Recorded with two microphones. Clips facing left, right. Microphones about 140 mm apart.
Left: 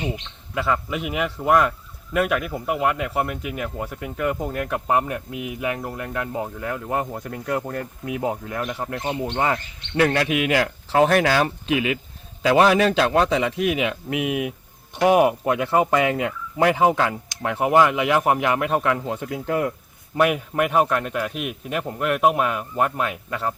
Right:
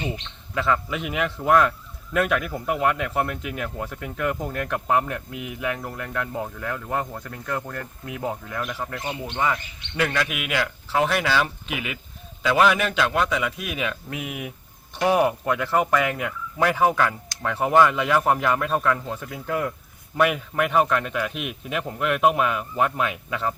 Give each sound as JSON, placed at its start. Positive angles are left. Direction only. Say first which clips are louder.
{"t": 0.5, "sound": "speech", "louder": "even", "side_deg": 5}
{"t": 9.0, "sound": "a man's voice", "louder": "left 3 dB", "side_deg": 30}
{"t": 12.4, "sound": "a man's voice", "louder": "left 4 dB", "side_deg": 35}
{"t": 20.1, "sound": "a man's voice", "louder": "left 2 dB", "side_deg": 5}